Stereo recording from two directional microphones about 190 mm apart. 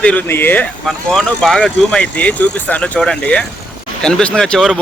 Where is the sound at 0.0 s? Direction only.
10° left (ahead or behind).